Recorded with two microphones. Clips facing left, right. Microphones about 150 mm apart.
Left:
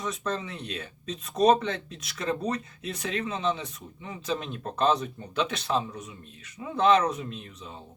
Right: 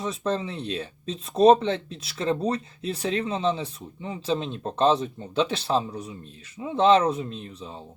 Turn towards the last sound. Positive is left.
turn(degrees=-30)  # may be behind; listen again after turning